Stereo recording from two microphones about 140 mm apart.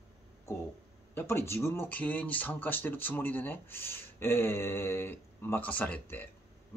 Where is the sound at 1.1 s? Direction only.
15° left (ahead or behind).